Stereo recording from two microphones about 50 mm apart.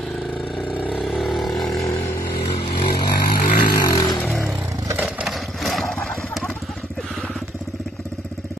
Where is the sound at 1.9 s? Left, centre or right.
Left.